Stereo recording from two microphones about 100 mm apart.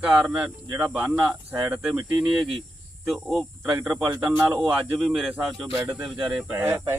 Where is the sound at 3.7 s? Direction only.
20° right (ahead or behind).